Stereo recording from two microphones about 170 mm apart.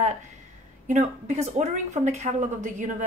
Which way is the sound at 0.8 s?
45° right (ahead or behind).